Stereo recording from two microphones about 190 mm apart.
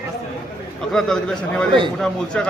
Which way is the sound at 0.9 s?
Centre (ahead or behind).